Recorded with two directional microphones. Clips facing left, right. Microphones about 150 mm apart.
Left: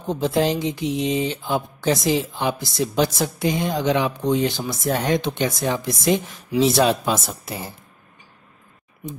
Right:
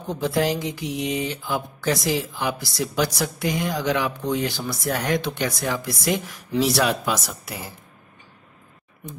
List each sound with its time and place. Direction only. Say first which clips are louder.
0.0 s speech: left 2 dB; 20° left (ahead or behind)